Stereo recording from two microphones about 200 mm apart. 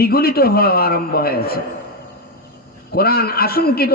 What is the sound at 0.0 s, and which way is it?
A man's voice, 50° left (ahead or behind).